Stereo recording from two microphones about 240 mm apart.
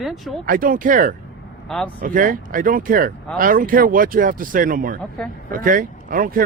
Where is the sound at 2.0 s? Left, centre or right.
Right.